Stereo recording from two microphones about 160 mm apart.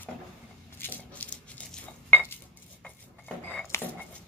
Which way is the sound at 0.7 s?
10° left (ahead or behind).